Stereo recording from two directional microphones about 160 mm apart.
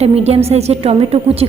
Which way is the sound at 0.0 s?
40° right (ahead or behind).